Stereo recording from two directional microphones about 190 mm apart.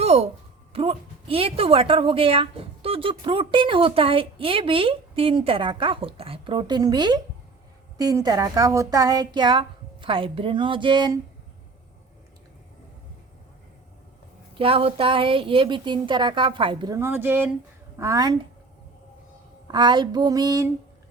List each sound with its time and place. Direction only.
0.0 s a sound: 35° right (ahead or behind)
0.7 s a woman's voice: 30° right (ahead or behind)
14.6 s a woman's voice: 30° right (ahead or behind)
19.6 s a woman's voice: 20° right (ahead or behind)